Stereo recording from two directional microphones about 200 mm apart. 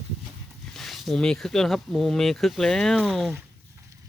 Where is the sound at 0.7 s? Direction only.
Centre (ahead or behind).